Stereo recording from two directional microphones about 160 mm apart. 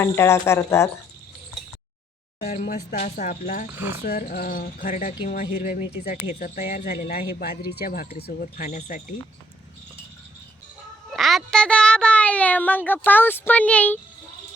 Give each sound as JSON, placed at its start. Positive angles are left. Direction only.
{"t": 0.0, "sound": "speech", "side_deg": 15}
{"t": 2.5, "sound": "speech", "side_deg": 60}
{"t": 3.7, "sound": "speech", "side_deg": -15}
{"t": 4.0, "sound": "speech", "side_deg": 70}
{"t": 11.1, "sound": "speech", "side_deg": 0}